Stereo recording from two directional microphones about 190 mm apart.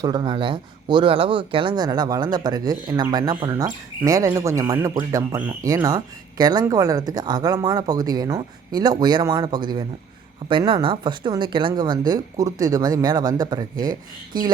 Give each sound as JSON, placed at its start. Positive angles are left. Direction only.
{"t": 0.0, "sound": "speech", "side_deg": -25}